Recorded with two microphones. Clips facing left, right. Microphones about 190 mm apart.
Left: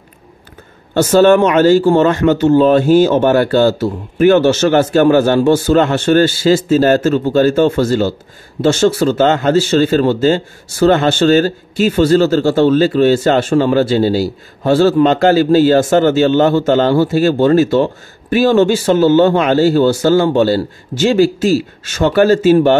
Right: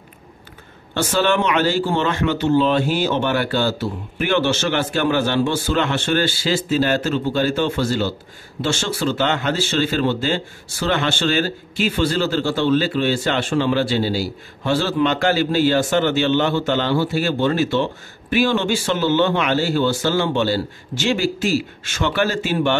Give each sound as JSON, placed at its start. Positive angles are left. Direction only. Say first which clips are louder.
{"t": 0.9, "sound": "speech", "louder": "left 10 dB", "side_deg": 45}